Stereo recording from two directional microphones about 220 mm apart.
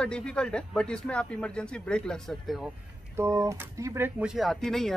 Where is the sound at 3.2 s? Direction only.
15° right (ahead or behind); by 4.9 s centre (ahead or behind).